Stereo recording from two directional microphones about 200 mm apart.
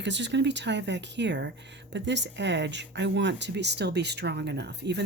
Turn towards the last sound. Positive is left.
turn(degrees=-55)  # may be behind; listen again after turning